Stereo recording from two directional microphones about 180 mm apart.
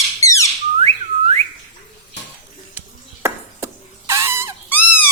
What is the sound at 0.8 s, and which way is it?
Whistling, 35° right (ahead or behind).